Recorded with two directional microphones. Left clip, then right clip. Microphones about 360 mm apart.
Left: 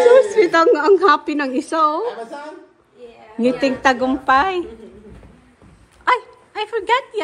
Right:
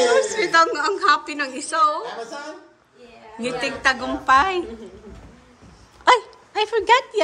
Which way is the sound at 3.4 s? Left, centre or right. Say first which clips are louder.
Left 5 dB; centre.